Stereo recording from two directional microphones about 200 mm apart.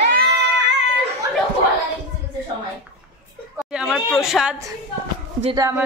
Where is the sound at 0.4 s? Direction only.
60° right (ahead or behind).